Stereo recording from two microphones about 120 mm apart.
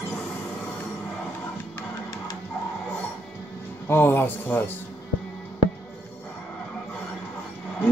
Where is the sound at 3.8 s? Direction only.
20° left (ahead or behind).